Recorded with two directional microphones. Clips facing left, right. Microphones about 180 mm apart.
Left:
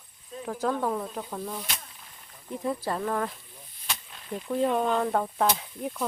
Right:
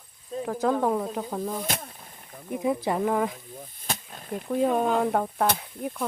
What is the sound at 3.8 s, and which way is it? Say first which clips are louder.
Snake: right 3 dB; 45° right (ahead or behind).